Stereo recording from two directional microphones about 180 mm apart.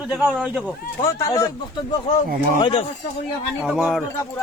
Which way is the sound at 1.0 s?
20° left (ahead or behind).